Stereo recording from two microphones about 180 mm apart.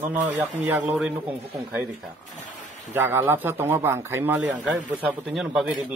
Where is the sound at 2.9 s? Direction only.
10° right (ahead or behind).